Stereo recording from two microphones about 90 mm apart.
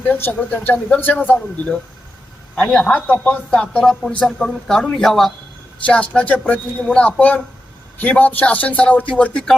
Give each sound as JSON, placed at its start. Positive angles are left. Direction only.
{"t": 0.0, "sound": "speech", "side_deg": 20}
{"t": 2.6, "sound": "speech", "side_deg": 10}